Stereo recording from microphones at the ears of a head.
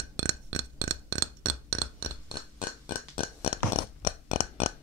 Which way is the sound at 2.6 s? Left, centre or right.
Left.